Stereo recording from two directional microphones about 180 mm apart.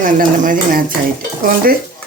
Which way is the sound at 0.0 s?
50° right (ahead or behind).